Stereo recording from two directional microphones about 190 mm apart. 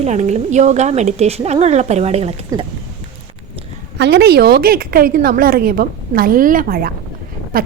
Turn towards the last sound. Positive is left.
turn(degrees=-50)  # may be behind; listen again after turning